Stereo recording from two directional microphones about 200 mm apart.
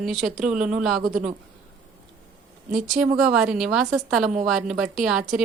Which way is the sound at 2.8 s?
Centre (ahead or behind).